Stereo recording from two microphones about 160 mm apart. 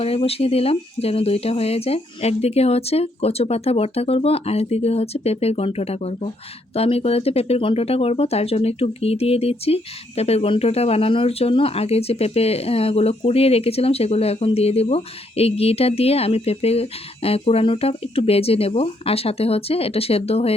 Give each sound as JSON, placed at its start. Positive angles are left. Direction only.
{"t": 0.0, "sound": "speech", "side_deg": 40}